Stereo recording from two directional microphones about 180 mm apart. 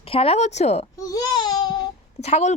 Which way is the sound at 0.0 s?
30° left (ahead or behind).